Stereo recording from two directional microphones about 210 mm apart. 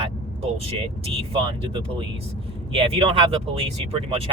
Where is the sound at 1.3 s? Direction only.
25° right (ahead or behind).